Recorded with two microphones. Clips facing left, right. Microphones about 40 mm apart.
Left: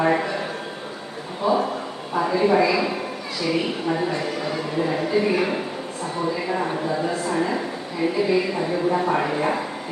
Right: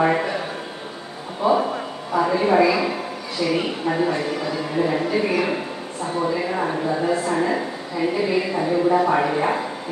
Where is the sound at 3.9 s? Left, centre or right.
Centre.